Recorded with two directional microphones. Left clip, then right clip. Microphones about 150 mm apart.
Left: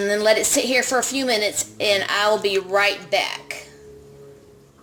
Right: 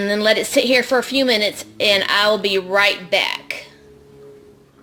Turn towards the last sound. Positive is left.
turn(degrees=-50)  # may be behind; listen again after turning